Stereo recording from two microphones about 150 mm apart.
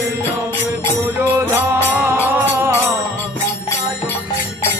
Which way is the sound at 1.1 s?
10° right (ahead or behind).